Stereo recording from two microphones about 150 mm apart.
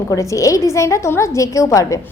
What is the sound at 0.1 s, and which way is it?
A woman's voice, 20° left (ahead or behind).